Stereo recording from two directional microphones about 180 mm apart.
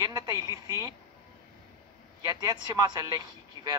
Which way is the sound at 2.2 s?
20° right (ahead or behind).